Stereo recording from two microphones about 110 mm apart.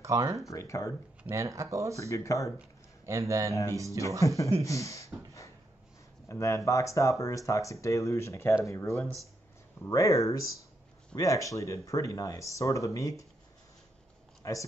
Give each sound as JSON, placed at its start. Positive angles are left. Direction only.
{"t": 0.0, "sound": "speech", "side_deg": -30}
{"t": 0.5, "sound": "speech", "side_deg": 30}
{"t": 1.3, "sound": "speech", "side_deg": -30}
{"t": 2.0, "sound": "speech", "side_deg": 30}
{"t": 3.1, "sound": "speech", "side_deg": -30}
{"t": 4.2, "sound": "speech", "side_deg": 30}
{"t": 14.4, "sound": "speech", "side_deg": 30}